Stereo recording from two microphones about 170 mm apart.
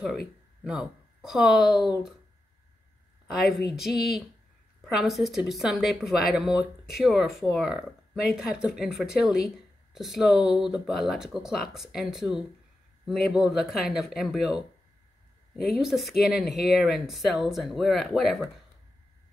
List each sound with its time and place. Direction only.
0.7 s speech: 5° right (ahead or behind)
3.7 s speech: centre (ahead or behind)